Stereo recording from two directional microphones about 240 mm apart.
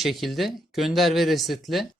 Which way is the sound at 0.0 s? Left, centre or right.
Centre.